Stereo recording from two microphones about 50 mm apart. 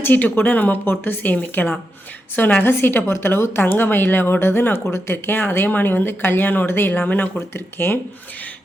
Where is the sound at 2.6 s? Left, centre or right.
Left.